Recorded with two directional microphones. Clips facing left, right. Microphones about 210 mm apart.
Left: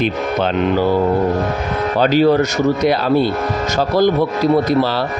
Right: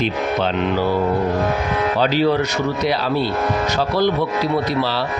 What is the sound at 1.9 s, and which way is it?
Speech, 45° left (ahead or behind).